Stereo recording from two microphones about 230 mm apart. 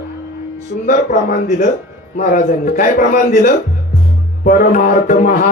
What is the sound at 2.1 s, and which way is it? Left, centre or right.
Music, left.